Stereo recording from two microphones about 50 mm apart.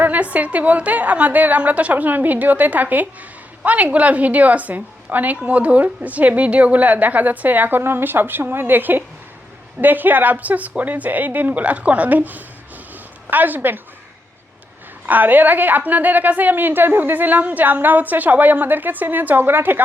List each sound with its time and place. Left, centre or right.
0.0 s a woman's voice: right
12.9 s a sound: right
15.0 s a woman's voice: right